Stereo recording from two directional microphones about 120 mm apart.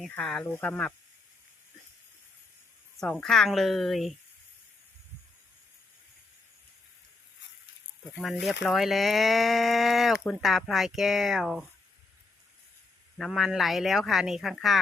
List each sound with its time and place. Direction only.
0.0 s speech: 5° left (ahead or behind)
0.5 s speech: 20° left (ahead or behind)
3.0 s speech: 5° left (ahead or behind)
8.2 s speech: centre (ahead or behind)
13.1 s speech: centre (ahead or behind)